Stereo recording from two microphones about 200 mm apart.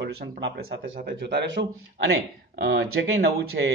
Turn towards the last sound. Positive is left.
turn(degrees=-60)  # may be behind; listen again after turning